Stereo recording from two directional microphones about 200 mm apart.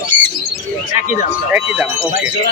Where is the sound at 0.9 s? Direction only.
35° left (ahead or behind).